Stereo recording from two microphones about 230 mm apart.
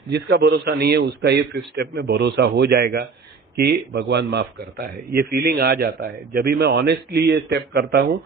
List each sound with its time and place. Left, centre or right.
0.1 s a man's voice: right